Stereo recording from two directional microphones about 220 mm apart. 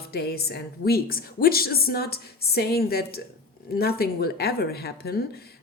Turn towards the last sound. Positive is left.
turn(degrees=45)  # may be behind; listen again after turning